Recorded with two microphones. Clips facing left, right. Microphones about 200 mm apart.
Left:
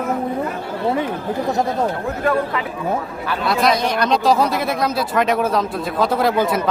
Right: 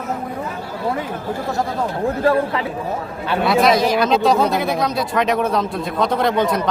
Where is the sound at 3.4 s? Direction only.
Centre (ahead or behind).